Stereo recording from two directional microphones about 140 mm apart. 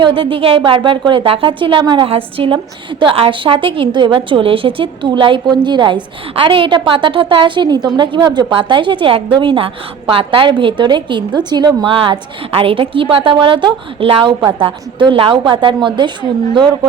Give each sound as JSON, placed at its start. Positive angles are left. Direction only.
{"t": 0.0, "sound": "a woman's voice", "side_deg": -40}